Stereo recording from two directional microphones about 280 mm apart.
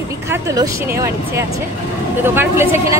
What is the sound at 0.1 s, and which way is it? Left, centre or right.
A woman's voice, centre.